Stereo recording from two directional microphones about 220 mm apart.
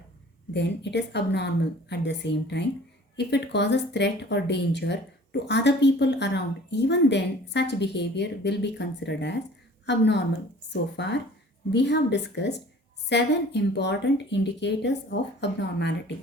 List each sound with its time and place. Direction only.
0.5 s a woman's voice: 50° left (ahead or behind)